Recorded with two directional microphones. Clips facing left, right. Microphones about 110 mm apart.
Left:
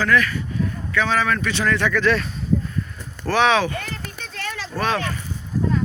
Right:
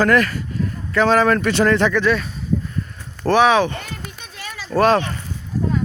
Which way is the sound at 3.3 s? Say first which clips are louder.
Right 4 dB; 15° right (ahead or behind).